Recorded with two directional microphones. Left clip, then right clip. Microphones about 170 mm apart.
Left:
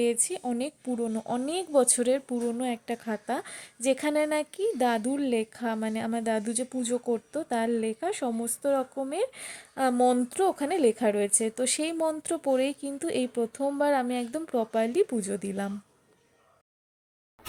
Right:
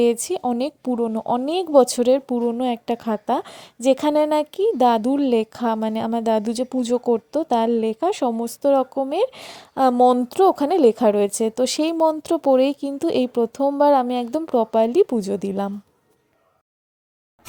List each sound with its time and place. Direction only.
0.0 s speech: 35° right (ahead or behind)